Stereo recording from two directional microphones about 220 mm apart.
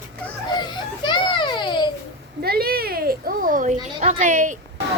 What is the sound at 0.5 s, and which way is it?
A child's voice, 20° left (ahead or behind).